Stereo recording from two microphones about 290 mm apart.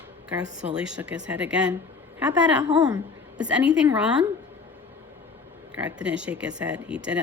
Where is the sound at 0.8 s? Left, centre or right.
Centre.